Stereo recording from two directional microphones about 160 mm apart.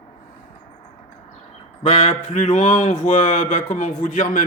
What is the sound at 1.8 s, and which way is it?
Mantra, 45° left (ahead or behind).